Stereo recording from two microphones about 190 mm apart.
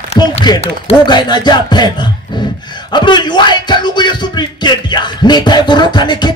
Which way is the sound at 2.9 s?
25° left (ahead or behind).